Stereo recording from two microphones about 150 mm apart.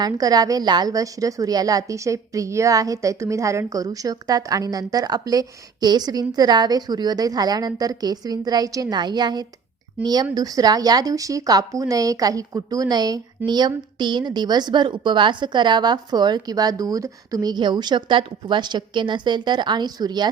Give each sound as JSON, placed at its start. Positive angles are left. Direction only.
{"t": 0.0, "sound": "a woman's voice", "side_deg": -25}